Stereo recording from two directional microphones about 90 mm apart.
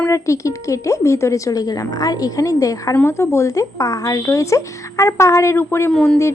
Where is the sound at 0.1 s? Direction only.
35° left (ahead or behind).